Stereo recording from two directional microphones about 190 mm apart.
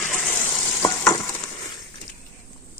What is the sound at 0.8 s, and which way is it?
Frying, 20° left (ahead or behind).